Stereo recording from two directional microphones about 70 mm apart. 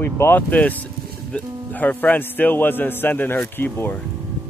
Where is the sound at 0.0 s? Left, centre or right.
Left.